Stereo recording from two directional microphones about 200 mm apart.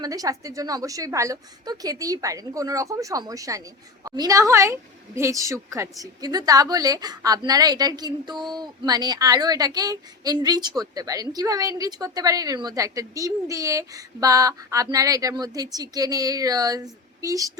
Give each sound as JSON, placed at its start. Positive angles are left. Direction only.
{"t": 0.0, "sound": "a woman's voice", "side_deg": -15}